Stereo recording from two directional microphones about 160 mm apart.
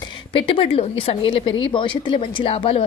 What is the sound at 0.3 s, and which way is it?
A woman's voice, 35° left (ahead or behind).